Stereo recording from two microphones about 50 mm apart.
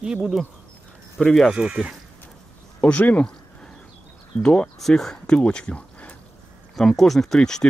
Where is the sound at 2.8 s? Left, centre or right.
Left.